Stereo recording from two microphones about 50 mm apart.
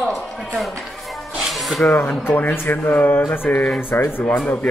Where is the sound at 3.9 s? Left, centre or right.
Left.